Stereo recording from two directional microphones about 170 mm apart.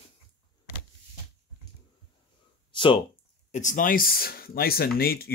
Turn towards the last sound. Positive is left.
turn(degrees=65)  # may be behind; listen again after turning